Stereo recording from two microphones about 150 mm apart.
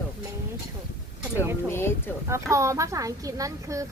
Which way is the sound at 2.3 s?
20° right (ahead or behind).